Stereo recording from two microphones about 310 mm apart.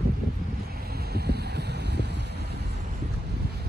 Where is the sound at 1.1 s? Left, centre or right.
Right.